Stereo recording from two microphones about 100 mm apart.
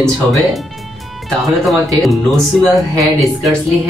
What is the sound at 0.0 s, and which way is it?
Speech, centre (ahead or behind).